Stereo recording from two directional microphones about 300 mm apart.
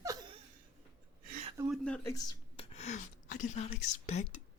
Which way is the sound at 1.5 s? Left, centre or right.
Centre.